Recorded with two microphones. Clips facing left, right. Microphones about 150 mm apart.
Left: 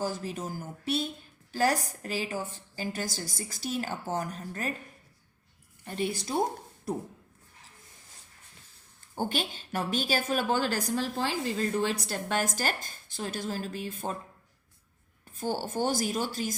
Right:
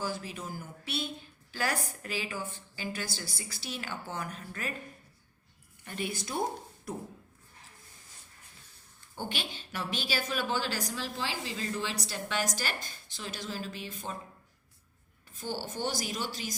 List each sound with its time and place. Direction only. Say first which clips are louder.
0.0 s a woman's voice: left 4 dB; 40° left (ahead or behind)
5.8 s a woman's voice: left 5 dB; 35° left (ahead or behind)
9.1 s a woman's voice: left 6 dB; 45° left (ahead or behind)
15.4 s a woman's voice: left 5 dB; 50° left (ahead or behind)